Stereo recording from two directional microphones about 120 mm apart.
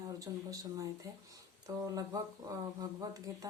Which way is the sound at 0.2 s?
30° right (ahead or behind).